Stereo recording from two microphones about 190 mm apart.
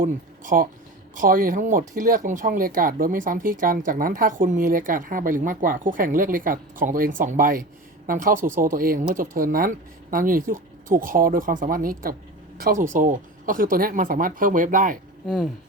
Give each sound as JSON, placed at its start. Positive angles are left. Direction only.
{"t": 0.0, "sound": "speech", "side_deg": -45}